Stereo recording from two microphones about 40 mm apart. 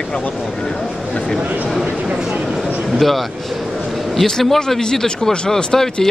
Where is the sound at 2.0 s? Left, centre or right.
Right.